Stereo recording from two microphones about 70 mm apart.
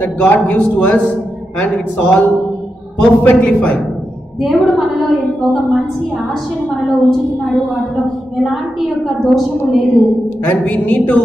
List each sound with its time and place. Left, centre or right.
0.0 s a man's voice: centre
4.4 s a woman's voice: centre
6.8 s a woman's voice: centre
10.4 s a man's voice: left